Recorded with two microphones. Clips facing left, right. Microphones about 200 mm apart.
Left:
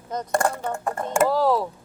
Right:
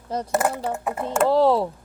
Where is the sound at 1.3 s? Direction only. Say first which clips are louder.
Right 3 dB; 25° right (ahead or behind).